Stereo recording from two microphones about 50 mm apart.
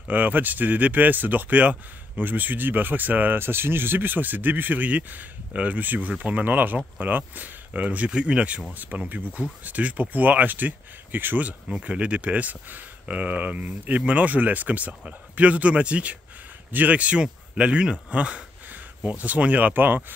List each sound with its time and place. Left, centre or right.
0.1 s speech: right
8.1 s speech: right
8.7 s speech: right
11.8 s speech: right